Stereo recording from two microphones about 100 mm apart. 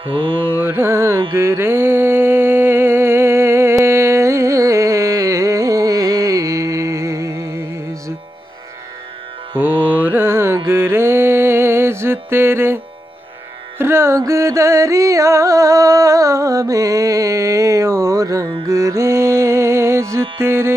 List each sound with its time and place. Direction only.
0.0 s carnatic music: 65° right (ahead or behind)
0.6 s carnatic music: 20° right (ahead or behind)
1.3 s mantra: 25° right (ahead or behind)
9.6 s mantra: 20° right (ahead or behind)
13.7 s music: 25° right (ahead or behind)